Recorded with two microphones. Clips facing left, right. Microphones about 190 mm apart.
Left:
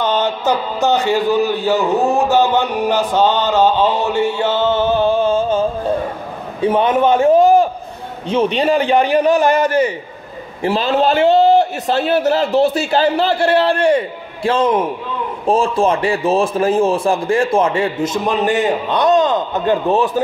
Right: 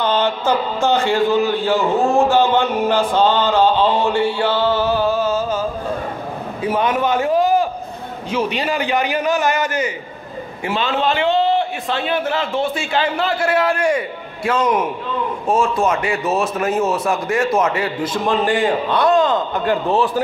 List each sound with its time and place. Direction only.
0.0 s a man's voice: 15° left (ahead or behind)
8.5 s a man's voice: 30° left (ahead or behind)